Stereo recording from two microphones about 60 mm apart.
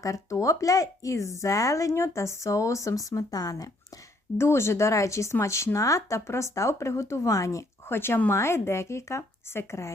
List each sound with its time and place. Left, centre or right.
0.0 s speech: left
4.4 s speech: left
7.9 s speech: left